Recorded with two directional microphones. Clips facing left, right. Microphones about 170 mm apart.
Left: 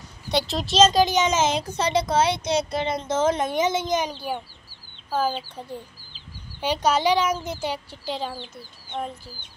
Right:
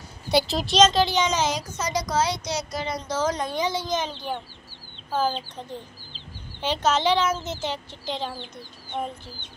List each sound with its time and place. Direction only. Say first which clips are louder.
0.3 s speech: right 2 dB; 5° right (ahead or behind)
1.2 s speech: left 3 dB; 20° left (ahead or behind)
5.1 s a child's voice: even; 10° left (ahead or behind)